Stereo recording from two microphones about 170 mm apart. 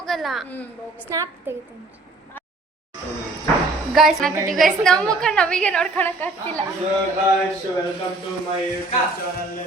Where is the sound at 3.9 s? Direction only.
Centre (ahead or behind).